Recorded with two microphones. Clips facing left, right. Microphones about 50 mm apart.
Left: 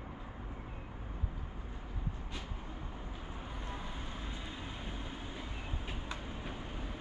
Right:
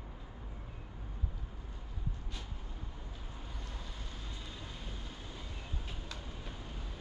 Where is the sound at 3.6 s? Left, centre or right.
Left.